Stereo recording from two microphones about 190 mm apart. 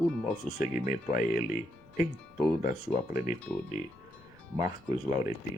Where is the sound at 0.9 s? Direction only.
40° left (ahead or behind).